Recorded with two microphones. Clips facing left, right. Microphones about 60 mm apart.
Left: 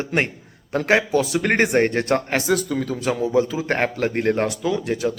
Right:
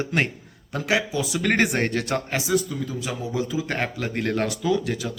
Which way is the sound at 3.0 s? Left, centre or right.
Left.